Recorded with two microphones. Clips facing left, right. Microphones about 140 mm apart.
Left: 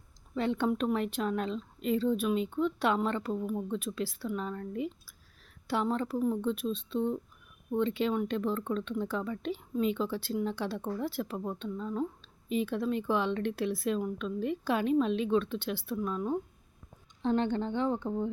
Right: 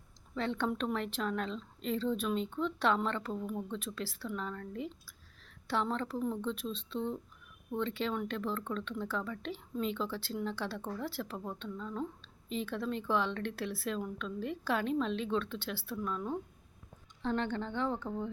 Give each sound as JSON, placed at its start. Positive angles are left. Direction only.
{"t": 0.3, "sound": "speech", "side_deg": 15}